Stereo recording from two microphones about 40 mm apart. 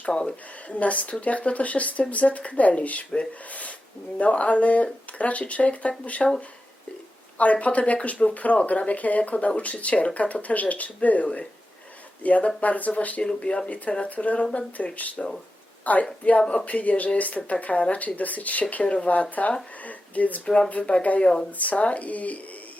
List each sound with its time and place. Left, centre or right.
0.1 s speech: left
6.2 s speech: centre
7.3 s speech: left
13.2 s speech: left
13.7 s a woman's voice: left